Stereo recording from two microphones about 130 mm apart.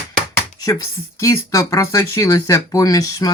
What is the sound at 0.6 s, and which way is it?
Speech, 25° left (ahead or behind).